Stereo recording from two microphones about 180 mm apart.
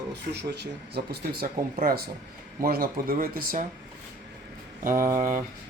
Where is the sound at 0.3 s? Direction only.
65° right (ahead or behind).